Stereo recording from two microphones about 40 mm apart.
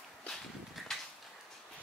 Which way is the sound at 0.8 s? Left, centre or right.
Centre.